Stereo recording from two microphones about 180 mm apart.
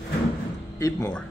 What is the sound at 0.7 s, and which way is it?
Speech, 15° left (ahead or behind).